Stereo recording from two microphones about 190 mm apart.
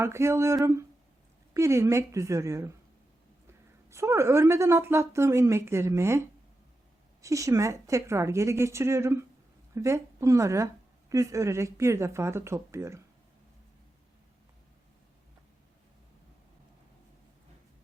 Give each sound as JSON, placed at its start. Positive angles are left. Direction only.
{"t": 0.0, "sound": "a woman's voice", "side_deg": -15}
{"t": 3.8, "sound": "a woman's voice", "side_deg": -15}